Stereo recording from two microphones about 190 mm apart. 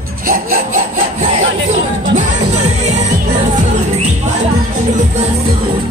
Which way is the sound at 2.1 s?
35° right (ahead or behind).